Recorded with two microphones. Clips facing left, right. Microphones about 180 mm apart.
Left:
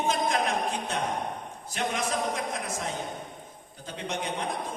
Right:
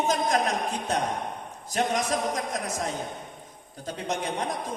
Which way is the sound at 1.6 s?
40° right (ahead or behind).